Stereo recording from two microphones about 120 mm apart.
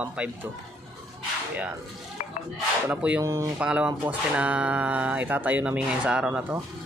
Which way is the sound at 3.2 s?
25° right (ahead or behind).